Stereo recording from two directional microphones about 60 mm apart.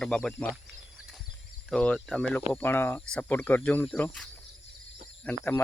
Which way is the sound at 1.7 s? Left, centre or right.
Centre.